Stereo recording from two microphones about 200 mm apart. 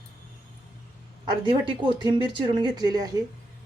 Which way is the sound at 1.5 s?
25° right (ahead or behind).